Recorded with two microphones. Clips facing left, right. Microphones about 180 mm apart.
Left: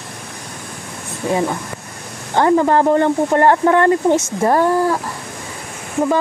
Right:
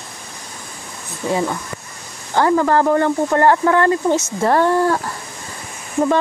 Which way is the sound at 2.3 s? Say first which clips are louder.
Left 2 dB; 20° left (ahead or behind).